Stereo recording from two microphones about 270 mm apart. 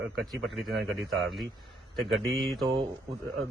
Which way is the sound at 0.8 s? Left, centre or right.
Centre.